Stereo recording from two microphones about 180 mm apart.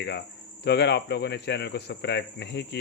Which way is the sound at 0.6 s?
70° left (ahead or behind).